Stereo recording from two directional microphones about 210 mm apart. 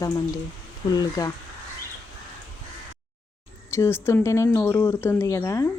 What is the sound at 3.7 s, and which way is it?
Speech, 10° left (ahead or behind).